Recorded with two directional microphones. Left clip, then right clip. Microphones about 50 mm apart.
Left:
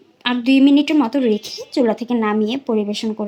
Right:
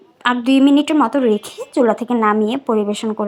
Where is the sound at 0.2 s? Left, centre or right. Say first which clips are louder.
Right 4 dB; centre.